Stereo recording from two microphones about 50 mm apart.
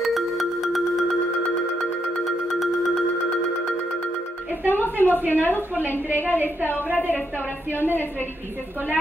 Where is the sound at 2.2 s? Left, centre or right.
Centre.